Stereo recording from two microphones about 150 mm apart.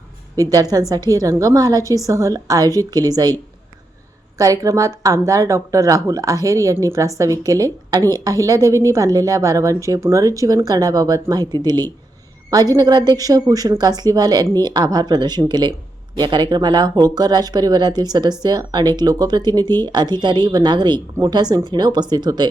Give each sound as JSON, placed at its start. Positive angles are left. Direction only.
{"t": 0.3, "sound": "a woman's voice", "side_deg": -25}
{"t": 4.4, "sound": "a woman's voice", "side_deg": -20}